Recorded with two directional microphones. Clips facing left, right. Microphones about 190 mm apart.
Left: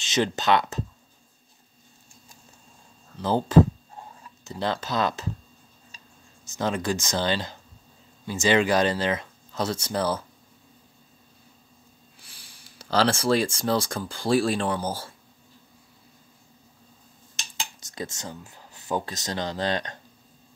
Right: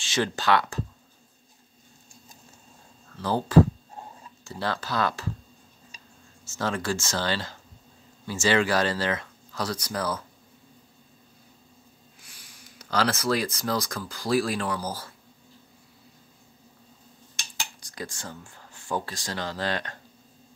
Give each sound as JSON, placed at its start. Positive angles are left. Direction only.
{"t": 0.0, "sound": "speech", "side_deg": 20}
{"t": 3.2, "sound": "speech", "side_deg": 20}
{"t": 6.4, "sound": "speech", "side_deg": 20}
{"t": 12.2, "sound": "speech", "side_deg": 30}
{"t": 17.6, "sound": "speech", "side_deg": 25}